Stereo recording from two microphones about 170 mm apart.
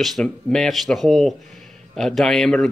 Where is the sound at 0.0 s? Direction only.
Centre (ahead or behind).